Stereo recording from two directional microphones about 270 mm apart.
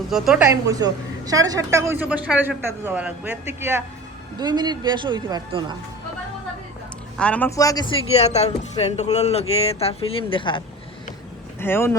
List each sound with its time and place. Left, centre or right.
0.1 s a woman's voice: centre
7.2 s a man's voice: centre
11.6 s speech: centre